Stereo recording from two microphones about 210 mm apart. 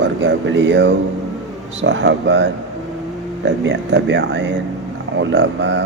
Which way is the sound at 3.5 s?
60° right (ahead or behind).